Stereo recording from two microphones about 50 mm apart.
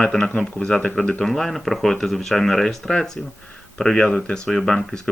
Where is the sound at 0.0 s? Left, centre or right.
Centre.